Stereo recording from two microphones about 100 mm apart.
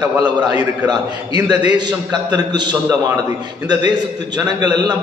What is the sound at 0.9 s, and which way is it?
A man's voice, 45° right (ahead or behind).